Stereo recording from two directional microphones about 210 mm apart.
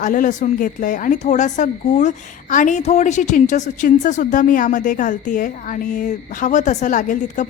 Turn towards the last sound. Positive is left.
turn(degrees=35)  # may be behind; listen again after turning